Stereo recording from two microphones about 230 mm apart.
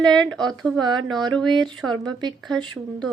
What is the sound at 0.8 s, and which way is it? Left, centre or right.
Speech, centre.